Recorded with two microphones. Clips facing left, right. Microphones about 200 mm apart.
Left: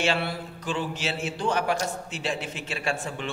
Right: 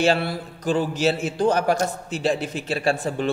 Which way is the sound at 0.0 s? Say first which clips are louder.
Right 6 dB; 40° right (ahead or behind).